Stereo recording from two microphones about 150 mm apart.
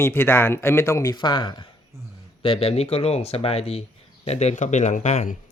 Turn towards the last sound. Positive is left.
turn(degrees=50)  # may be behind; listen again after turning